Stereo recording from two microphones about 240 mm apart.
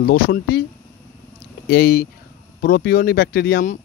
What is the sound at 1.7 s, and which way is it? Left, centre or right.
Speech, left.